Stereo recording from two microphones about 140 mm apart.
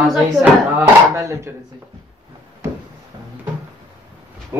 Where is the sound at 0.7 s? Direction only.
20° right (ahead or behind).